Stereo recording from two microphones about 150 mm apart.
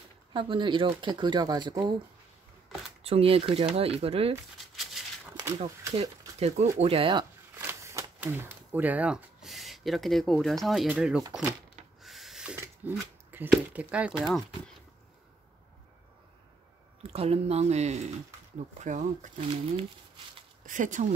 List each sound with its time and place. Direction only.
0.3 s speech: 35° right (ahead or behind)
3.0 s speech: 40° right (ahead or behind)
5.9 s speech: 45° right (ahead or behind)
7.5 s speech: 20° right (ahead or behind)
12.0 s a sound: centre (ahead or behind)
12.8 s speech: 10° right (ahead or behind)
17.0 s speech: 45° right (ahead or behind)
20.6 s speech: 60° right (ahead or behind)